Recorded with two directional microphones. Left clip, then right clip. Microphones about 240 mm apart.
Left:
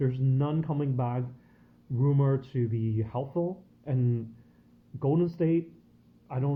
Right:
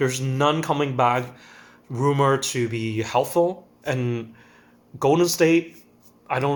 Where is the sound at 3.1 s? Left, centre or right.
Right.